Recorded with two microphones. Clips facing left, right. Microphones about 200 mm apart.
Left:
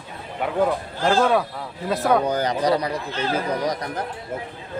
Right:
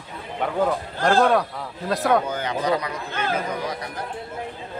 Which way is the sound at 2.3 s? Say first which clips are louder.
Left 3 dB; 40° left (ahead or behind).